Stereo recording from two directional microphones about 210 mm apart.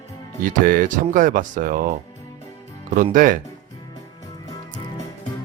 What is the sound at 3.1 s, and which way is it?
Speech, 40° right (ahead or behind).